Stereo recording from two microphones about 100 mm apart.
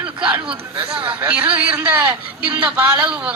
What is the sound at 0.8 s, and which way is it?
Speech, 60° right (ahead or behind).